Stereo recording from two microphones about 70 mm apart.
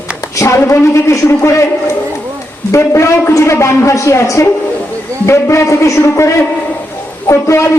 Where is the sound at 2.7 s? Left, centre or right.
Left.